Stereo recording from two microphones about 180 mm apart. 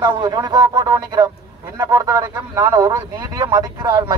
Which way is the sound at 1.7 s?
20° right (ahead or behind).